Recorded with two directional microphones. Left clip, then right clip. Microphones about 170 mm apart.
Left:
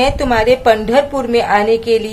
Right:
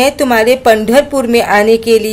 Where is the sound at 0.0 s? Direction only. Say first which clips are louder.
Right 3 dB; 35° right (ahead or behind).